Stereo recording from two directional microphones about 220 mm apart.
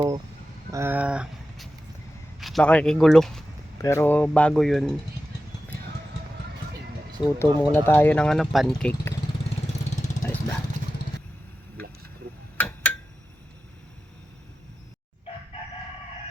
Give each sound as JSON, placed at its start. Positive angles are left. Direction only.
{"t": 0.7, "sound": "speech", "side_deg": -10}
{"t": 3.8, "sound": "speech", "side_deg": 15}
{"t": 7.3, "sound": "speech", "side_deg": 10}
{"t": 10.2, "sound": "vehicle", "side_deg": 35}
{"t": 12.5, "sound": "tick-tock", "side_deg": 10}